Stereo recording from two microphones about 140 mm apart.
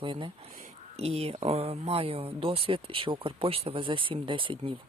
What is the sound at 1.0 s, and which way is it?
Speech, 45° right (ahead or behind).